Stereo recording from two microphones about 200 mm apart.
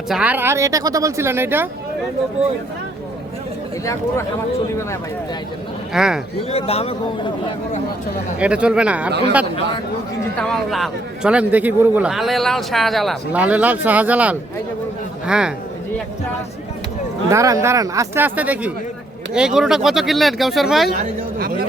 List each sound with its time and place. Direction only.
0.1 s speech: 5° right (ahead or behind)
5.9 s a man's voice: centre (ahead or behind)
6.5 s speech: 30° left (ahead or behind)
8.4 s a man's voice: 5° right (ahead or behind)
10.3 s a man's voice: 5° left (ahead or behind)
17.2 s a man's voice: 15° right (ahead or behind); by 20.9 s centre (ahead or behind)
20.9 s speech: 45° right (ahead or behind)